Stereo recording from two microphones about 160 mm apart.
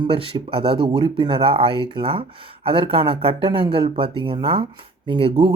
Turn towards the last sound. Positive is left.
turn(degrees=-35)  # may be behind; listen again after turning